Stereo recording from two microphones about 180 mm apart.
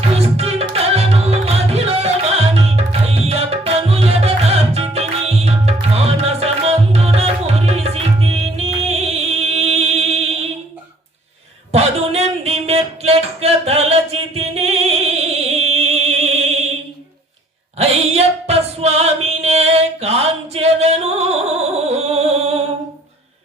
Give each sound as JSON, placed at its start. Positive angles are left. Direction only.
{"t": 0.2, "sound": "music", "side_deg": -35}
{"t": 2.6, "sound": "tabla", "side_deg": -35}
{"t": 11.7, "sound": "a sound", "side_deg": -35}
{"t": 17.7, "sound": "music", "side_deg": -35}